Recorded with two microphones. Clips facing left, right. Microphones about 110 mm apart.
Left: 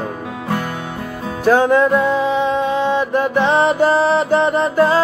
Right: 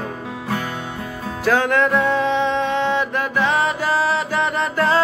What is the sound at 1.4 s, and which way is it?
Music, 15° left (ahead or behind).